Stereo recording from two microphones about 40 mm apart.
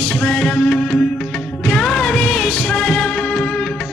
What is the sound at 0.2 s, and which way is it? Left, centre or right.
Music, centre.